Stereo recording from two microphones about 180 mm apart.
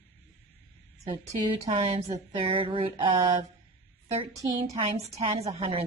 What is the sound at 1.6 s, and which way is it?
A woman's voice, 35° right (ahead or behind).